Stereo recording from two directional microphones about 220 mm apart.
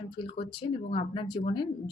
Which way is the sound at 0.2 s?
25° left (ahead or behind).